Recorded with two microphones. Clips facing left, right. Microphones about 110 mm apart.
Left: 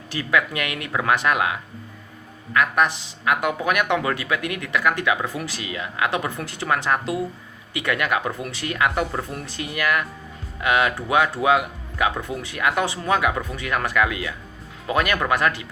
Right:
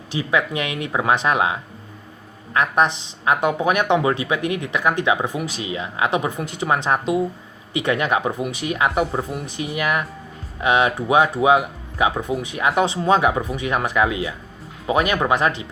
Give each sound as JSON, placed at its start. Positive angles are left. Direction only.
{"t": 0.1, "sound": "speech", "side_deg": -20}